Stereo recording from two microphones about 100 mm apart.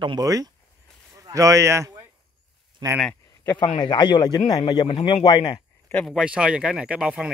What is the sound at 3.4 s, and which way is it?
Speech, 25° left (ahead or behind).